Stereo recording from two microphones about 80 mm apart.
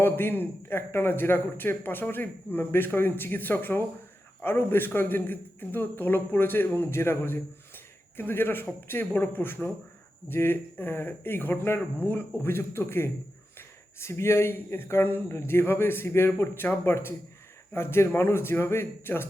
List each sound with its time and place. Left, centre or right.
0.0 s a man's voice: left